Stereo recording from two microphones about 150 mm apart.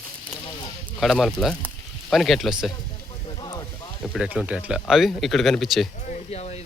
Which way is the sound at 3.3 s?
30° left (ahead or behind).